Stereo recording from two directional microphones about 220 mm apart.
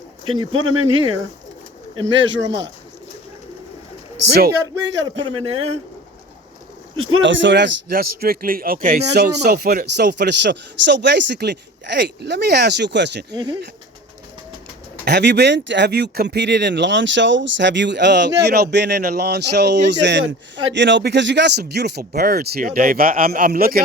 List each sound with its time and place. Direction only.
0.3 s speech: 70° right (ahead or behind)
2.0 s speech: 55° right (ahead or behind)
5.2 s speech: 25° right (ahead or behind)
6.9 s a man's voice: 70° right (ahead or behind); by 13.2 s 55° right (ahead or behind)
13.3 s speech: 20° right (ahead or behind)
15.0 s a man's voice: 50° right (ahead or behind)